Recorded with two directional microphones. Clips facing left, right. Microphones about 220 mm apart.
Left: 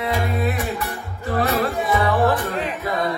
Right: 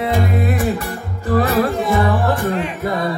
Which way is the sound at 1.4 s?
50° right (ahead or behind).